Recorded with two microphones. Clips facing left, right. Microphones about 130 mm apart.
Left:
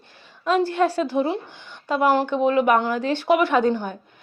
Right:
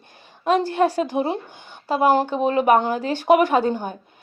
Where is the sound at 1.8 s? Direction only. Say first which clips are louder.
Right 1 dB; 35° right (ahead or behind).